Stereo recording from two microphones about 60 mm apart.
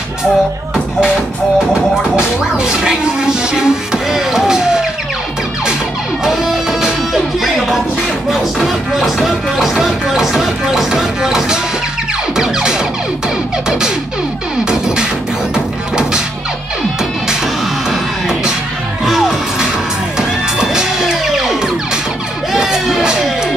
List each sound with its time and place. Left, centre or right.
1.7 s speech: centre
6.2 s music: centre
13.7 s speech: centre
14.6 s music: centre
19.0 s music: centre
22.5 s a sound: centre